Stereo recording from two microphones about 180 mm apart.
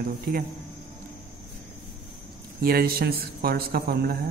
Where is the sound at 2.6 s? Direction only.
55° right (ahead or behind).